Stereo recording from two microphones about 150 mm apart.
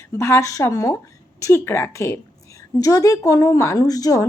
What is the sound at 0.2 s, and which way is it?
A woman's voice, 20° left (ahead or behind).